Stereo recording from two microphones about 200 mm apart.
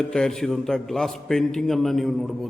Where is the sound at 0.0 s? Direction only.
5° left (ahead or behind).